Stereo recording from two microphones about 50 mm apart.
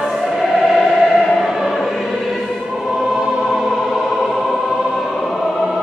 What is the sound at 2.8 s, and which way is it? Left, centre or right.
Choir, centre.